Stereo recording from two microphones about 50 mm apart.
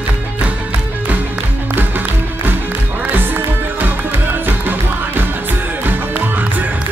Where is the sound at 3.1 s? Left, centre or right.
Right.